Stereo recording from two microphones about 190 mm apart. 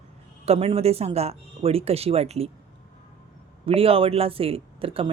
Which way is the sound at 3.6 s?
30° right (ahead or behind).